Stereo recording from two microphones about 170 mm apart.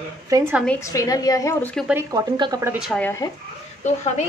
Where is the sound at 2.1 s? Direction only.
20° right (ahead or behind).